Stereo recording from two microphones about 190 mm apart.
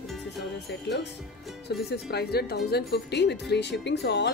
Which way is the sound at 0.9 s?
65° left (ahead or behind).